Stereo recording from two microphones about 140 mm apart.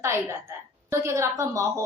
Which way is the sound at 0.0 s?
20° right (ahead or behind).